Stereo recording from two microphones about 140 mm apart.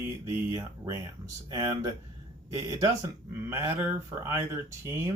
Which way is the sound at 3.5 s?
15° right (ahead or behind).